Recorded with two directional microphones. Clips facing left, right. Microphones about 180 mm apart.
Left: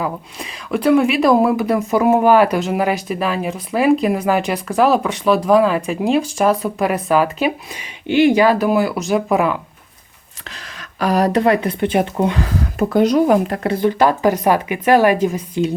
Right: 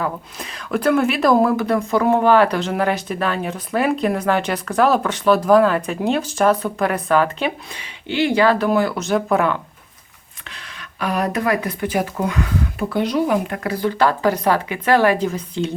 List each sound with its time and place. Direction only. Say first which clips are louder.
0.0 s speech: left 1 dB; centre (ahead or behind)
6.7 s speech: left 2 dB; 10° left (ahead or behind)
10.5 s speech: left 2 dB; 40° left (ahead or behind)
12.8 s speech: left 7 dB; 45° left (ahead or behind); by 15.7 s 15° left (ahead or behind)